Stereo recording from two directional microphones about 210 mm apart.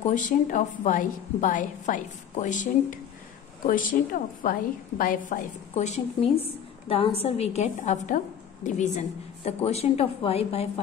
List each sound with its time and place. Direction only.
0.0 s a woman's voice: 40° left (ahead or behind)